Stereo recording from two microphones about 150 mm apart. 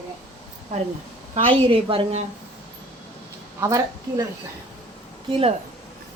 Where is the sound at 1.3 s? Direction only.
40° right (ahead or behind).